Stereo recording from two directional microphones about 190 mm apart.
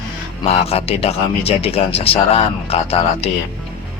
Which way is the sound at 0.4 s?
30° left (ahead or behind).